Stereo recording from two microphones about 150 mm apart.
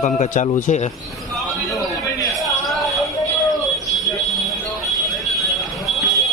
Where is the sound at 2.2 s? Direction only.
Centre (ahead or behind).